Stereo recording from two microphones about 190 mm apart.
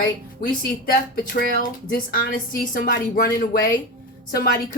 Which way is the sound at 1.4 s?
50° left (ahead or behind).